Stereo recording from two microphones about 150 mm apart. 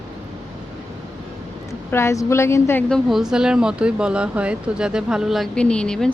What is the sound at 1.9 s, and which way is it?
Speech, 15° left (ahead or behind).